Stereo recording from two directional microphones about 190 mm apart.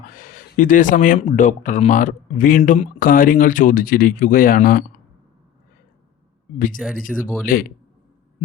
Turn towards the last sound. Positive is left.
turn(degrees=-5)  # may be behind; listen again after turning